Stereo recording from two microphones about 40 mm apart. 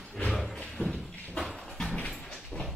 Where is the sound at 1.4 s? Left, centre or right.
Centre.